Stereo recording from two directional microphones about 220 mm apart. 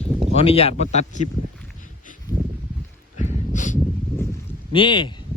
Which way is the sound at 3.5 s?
35° left (ahead or behind).